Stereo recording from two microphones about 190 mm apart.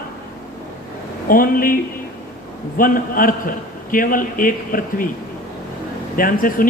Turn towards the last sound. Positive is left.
turn(degrees=45)  # may be behind; listen again after turning